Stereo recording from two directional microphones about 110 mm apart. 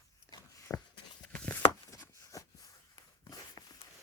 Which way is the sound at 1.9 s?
30° left (ahead or behind).